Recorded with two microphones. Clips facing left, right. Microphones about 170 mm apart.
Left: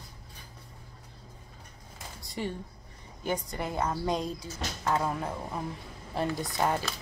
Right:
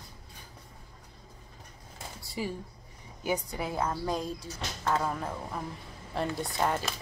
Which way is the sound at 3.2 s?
10° right (ahead or behind).